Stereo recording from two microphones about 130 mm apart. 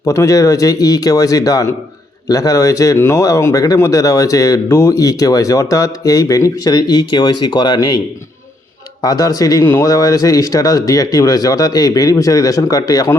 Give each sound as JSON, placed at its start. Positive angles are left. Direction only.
{"t": 0.0, "sound": "speech", "side_deg": 25}